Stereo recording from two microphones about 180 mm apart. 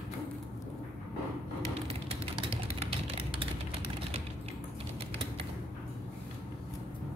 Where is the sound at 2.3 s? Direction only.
30° right (ahead or behind).